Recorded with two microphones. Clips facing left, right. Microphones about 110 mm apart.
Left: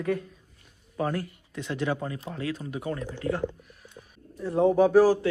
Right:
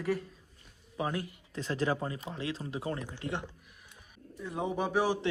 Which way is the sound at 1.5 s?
35° right (ahead or behind).